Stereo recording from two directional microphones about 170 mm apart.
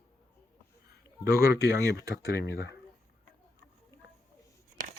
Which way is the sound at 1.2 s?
15° right (ahead or behind).